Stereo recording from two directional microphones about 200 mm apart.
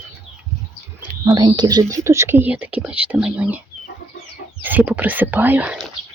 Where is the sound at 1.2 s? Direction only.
20° right (ahead or behind).